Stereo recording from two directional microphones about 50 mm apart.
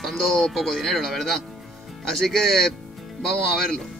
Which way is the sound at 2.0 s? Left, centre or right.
Centre.